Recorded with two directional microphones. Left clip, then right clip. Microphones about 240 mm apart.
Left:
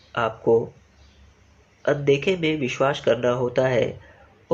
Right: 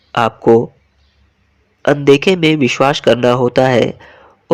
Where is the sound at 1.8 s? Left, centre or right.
Right.